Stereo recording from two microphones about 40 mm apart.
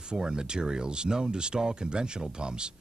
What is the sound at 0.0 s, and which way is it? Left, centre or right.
Speech, centre.